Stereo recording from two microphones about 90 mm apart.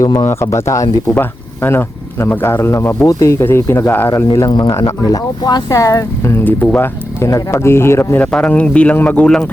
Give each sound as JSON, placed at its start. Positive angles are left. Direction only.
{"t": 0.0, "sound": "speech", "side_deg": 35}
{"t": 1.1, "sound": "speech", "side_deg": 25}
{"t": 4.7, "sound": "speech", "side_deg": 40}
{"t": 6.4, "sound": "speech", "side_deg": 20}
{"t": 7.3, "sound": "speech", "side_deg": 35}
{"t": 8.2, "sound": "speech", "side_deg": 10}